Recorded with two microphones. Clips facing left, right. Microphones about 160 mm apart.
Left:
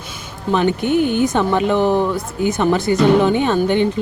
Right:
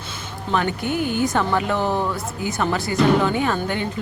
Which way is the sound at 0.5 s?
20° left (ahead or behind).